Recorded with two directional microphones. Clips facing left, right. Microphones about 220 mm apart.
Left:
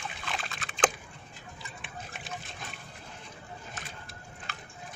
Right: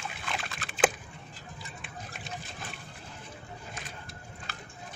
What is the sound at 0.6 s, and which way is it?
Typing, centre (ahead or behind).